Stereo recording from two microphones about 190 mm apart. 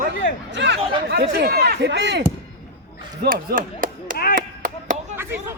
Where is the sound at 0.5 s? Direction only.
65° right (ahead or behind).